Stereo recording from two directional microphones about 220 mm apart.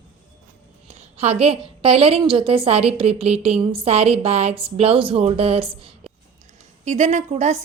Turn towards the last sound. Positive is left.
turn(degrees=-30)  # may be behind; listen again after turning